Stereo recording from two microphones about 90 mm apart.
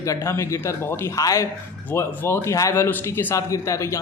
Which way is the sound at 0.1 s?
35° left (ahead or behind).